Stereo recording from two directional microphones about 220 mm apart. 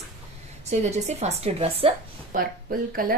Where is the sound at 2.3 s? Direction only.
40° right (ahead or behind).